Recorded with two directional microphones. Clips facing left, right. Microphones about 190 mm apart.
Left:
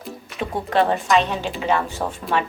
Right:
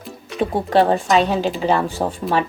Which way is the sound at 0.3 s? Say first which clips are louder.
Right 4 dB; 35° right (ahead or behind).